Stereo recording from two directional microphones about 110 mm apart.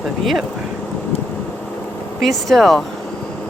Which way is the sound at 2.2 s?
5° left (ahead or behind).